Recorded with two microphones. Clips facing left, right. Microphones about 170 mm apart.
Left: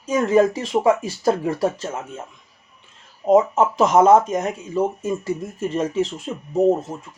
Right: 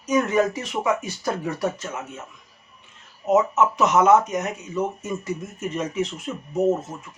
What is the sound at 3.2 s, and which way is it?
Speech, 30° left (ahead or behind).